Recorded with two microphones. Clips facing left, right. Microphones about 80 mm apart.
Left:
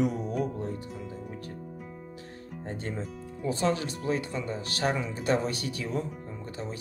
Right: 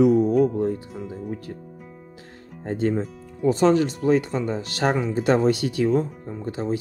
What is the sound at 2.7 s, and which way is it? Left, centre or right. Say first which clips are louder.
Speech: right 13 dB; right.